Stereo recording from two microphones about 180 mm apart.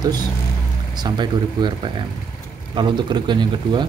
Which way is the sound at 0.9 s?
25° right (ahead or behind).